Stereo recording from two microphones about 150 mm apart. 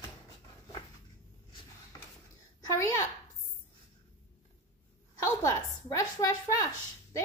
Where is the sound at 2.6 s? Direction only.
20° left (ahead or behind).